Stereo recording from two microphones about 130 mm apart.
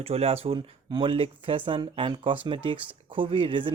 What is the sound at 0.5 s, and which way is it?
Speech, 40° right (ahead or behind).